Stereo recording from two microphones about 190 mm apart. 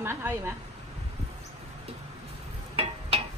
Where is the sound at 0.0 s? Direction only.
10° right (ahead or behind).